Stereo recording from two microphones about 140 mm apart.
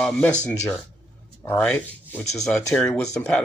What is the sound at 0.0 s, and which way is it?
Speech, 5° left (ahead or behind).